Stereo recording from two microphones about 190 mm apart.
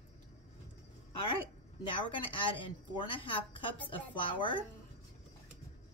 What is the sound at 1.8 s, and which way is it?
A woman's voice, 25° left (ahead or behind).